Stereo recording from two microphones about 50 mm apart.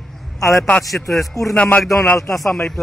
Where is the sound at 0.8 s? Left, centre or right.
Centre.